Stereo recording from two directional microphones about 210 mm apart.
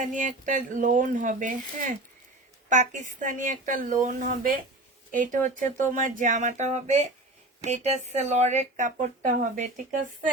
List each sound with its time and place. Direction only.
0.0 s speech: 40° right (ahead or behind)